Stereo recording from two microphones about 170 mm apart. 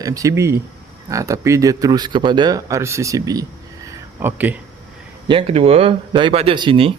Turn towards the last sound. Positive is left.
turn(degrees=-30)  # may be behind; listen again after turning